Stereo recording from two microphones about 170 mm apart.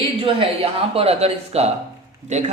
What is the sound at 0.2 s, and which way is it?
Speech, 35° right (ahead or behind).